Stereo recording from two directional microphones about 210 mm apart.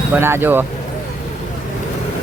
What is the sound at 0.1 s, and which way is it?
Speech, 10° right (ahead or behind).